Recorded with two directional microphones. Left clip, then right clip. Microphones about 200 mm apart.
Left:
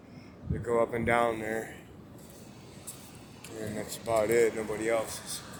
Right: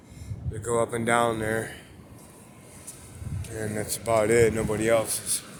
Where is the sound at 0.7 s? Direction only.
20° right (ahead or behind).